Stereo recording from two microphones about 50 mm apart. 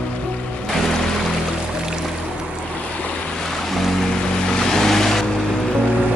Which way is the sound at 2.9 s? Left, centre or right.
Left.